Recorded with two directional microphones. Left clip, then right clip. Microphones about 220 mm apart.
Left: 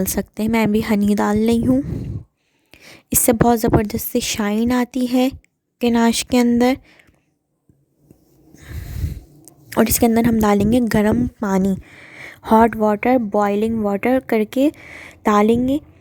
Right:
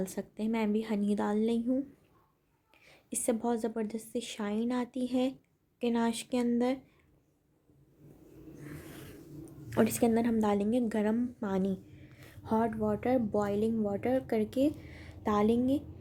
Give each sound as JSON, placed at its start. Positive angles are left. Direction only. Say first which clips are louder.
{"t": 0.0, "sound": "a woman's voice", "louder": "left 14 dB", "side_deg": 50}
{"t": 8.5, "sound": "snort", "louder": "left 8 dB", "side_deg": 40}
{"t": 9.6, "sound": "a woman's voice", "louder": "left 12 dB", "side_deg": 45}